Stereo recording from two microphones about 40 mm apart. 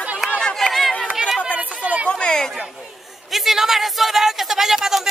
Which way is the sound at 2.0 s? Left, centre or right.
Left.